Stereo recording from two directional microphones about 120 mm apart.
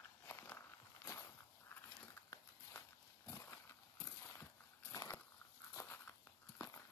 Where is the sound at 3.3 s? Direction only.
25° left (ahead or behind).